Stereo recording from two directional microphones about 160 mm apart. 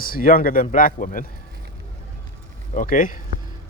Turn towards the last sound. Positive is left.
turn(degrees=55)  # may be behind; listen again after turning